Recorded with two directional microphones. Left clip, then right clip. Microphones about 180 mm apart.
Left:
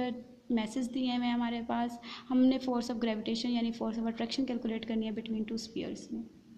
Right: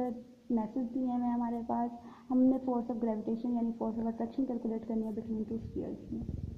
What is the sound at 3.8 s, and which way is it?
A woman's voice, 30° left (ahead or behind).